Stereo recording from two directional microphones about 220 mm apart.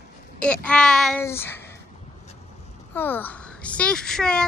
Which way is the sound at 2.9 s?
10° left (ahead or behind).